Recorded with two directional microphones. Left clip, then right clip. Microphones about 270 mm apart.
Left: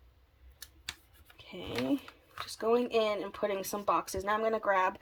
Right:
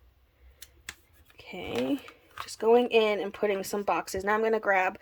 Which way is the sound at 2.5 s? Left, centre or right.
Centre.